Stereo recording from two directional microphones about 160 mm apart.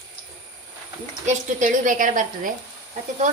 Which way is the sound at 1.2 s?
55° right (ahead or behind).